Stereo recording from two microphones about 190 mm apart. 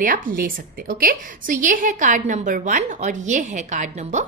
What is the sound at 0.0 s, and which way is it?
A woman's voice, 45° right (ahead or behind).